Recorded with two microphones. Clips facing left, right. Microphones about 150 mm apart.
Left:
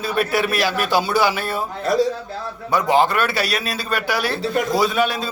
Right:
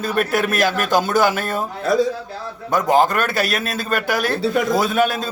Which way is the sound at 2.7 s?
45° right (ahead or behind).